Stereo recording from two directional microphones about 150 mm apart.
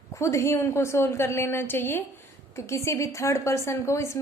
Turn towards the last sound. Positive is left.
turn(degrees=20)  # may be behind; listen again after turning